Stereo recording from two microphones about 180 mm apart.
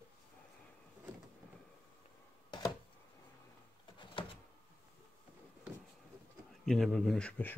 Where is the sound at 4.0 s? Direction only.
30° left (ahead or behind).